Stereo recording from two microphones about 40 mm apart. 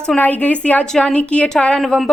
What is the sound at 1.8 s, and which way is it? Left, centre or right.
Speech, centre.